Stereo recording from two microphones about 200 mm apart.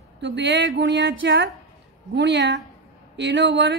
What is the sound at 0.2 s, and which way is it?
Speech, 60° right (ahead or behind).